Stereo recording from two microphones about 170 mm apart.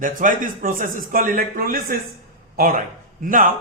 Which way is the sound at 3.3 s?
50° right (ahead or behind).